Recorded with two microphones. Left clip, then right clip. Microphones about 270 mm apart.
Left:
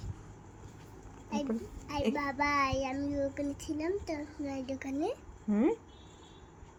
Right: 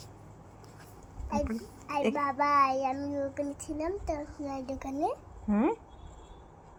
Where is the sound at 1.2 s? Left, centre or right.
Centre.